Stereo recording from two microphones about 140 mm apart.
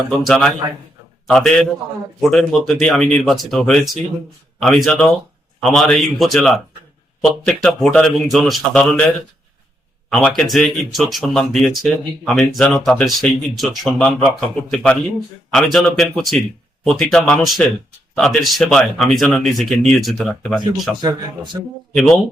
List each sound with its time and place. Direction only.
0.3 s speech: 5° left (ahead or behind)
10.2 s speech: 5° left (ahead or behind)
21.0 s a man's voice: 35° right (ahead or behind)
21.9 s speech: 5° left (ahead or behind)